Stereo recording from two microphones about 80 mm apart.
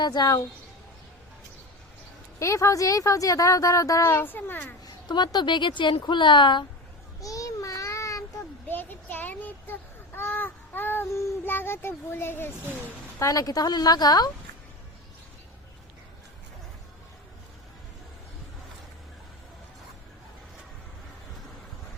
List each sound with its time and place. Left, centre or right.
0.0 s a woman's voice: left
2.4 s a woman's voice: left
4.9 s speech: left
6.0 s a woman's voice: left
7.2 s child singing: left
8.6 s a sound: left
11.1 s child singing: left
11.4 s a child's voice: left
13.1 s a woman's voice: left